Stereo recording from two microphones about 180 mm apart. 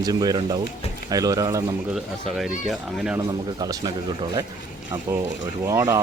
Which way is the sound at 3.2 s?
20° right (ahead or behind).